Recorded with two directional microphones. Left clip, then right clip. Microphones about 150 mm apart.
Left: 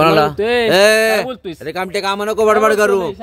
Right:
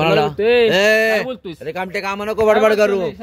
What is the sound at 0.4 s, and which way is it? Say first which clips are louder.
Speech: right 2 dB; 55° left (ahead or behind).